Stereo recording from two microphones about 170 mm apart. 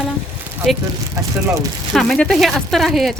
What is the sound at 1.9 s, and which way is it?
Speech, 5° left (ahead or behind).